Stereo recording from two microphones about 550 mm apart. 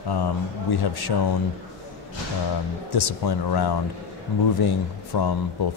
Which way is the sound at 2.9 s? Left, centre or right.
Left.